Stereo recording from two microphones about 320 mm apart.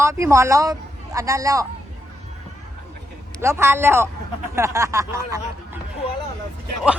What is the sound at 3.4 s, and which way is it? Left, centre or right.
A man's voice, centre.